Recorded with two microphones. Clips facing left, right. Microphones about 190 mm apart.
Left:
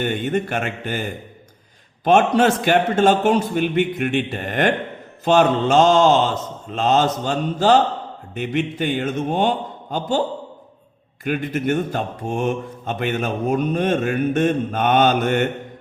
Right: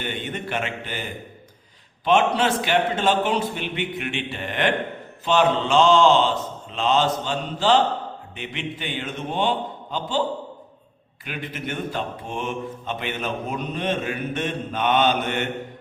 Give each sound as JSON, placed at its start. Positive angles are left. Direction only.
{"t": 0.0, "sound": "speech", "side_deg": 45}